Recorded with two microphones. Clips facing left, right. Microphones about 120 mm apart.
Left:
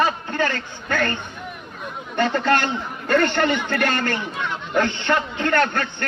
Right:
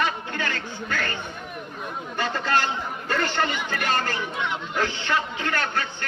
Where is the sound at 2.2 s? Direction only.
60° left (ahead or behind).